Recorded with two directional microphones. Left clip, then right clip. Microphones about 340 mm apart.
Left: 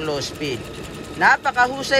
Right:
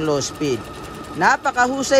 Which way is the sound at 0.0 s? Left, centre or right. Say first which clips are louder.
Right 4 dB; right.